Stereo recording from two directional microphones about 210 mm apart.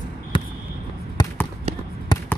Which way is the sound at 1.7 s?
30° right (ahead or behind).